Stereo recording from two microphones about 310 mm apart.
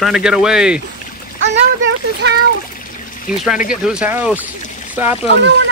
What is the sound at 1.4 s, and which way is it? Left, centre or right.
Speech, right.